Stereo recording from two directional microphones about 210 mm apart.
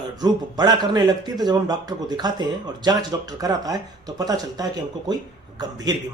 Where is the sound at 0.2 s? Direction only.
20° right (ahead or behind).